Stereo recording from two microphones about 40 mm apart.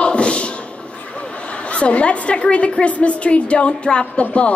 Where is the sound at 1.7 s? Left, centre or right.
Left.